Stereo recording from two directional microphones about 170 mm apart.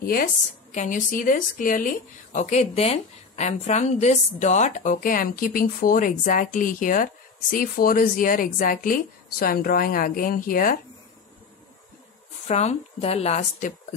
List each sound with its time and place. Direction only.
0.0 s a woman's voice: 60° left (ahead or behind)
0.7 s a woman's voice: 50° left (ahead or behind)
12.4 s speech: 40° left (ahead or behind)